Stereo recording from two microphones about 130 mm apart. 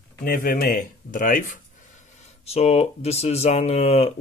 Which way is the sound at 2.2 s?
55° left (ahead or behind).